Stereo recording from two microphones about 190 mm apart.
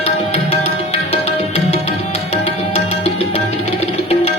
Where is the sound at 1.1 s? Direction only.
35° left (ahead or behind).